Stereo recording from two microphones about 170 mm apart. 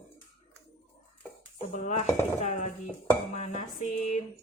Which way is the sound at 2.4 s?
45° left (ahead or behind).